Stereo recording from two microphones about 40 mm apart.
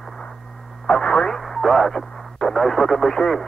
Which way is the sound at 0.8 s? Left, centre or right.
Centre.